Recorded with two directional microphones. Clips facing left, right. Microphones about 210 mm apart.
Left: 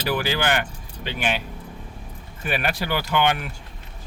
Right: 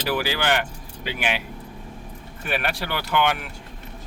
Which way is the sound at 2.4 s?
Centre (ahead or behind).